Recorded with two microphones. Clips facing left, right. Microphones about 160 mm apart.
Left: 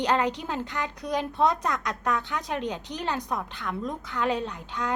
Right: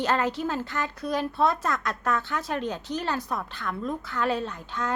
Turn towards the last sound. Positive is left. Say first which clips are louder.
# even
turn(degrees=15)  # may be behind; listen again after turning